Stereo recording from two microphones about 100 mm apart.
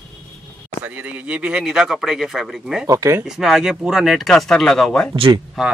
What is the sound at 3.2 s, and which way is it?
Speech, 5° right (ahead or behind).